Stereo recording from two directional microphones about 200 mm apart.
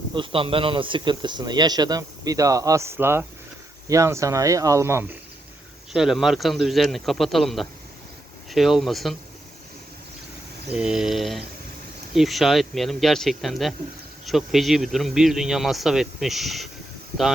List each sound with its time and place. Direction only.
0.1 s speech: 25° right (ahead or behind)
5.9 s speech: centre (ahead or behind)
10.7 s speech: 5° right (ahead or behind)